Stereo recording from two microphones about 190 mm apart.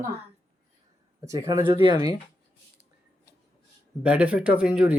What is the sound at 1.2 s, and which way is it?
Speech, 15° right (ahead or behind).